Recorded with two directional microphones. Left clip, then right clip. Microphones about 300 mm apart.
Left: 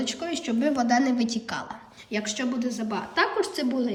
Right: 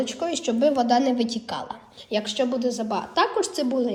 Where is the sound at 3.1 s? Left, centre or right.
Right.